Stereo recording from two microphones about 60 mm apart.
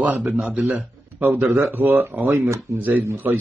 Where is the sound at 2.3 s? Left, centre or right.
Right.